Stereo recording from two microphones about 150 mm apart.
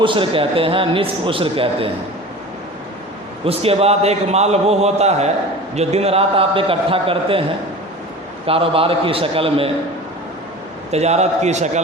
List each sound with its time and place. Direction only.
0.0 s a man's voice: 35° right (ahead or behind)
3.4 s a man's voice: 40° right (ahead or behind)
8.4 s a man's voice: 40° right (ahead or behind)
10.9 s a man's voice: 45° right (ahead or behind)